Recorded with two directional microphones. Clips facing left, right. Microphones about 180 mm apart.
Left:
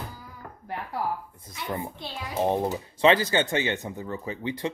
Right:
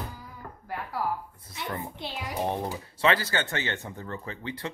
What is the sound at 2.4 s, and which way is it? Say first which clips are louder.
Speech: left 5 dB; 20° left (ahead or behind).